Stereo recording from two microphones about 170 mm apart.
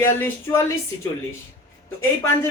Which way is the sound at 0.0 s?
15° left (ahead or behind).